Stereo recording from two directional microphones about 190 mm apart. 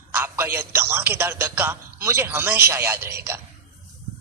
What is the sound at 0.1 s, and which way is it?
A man's voice, 10° right (ahead or behind).